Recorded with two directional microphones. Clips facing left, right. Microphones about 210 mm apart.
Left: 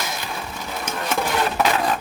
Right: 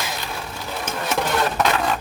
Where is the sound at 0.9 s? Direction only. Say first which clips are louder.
Right 1 dB; centre (ahead or behind).